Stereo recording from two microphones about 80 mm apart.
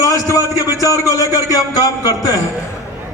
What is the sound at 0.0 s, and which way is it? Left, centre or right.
A man's voice, left.